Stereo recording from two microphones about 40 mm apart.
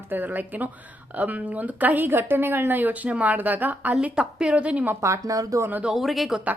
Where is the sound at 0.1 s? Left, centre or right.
Right.